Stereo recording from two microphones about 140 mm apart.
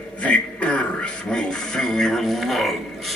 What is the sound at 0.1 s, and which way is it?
A man's voice, 10° left (ahead or behind).